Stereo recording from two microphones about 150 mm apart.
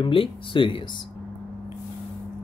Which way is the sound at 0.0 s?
35° left (ahead or behind).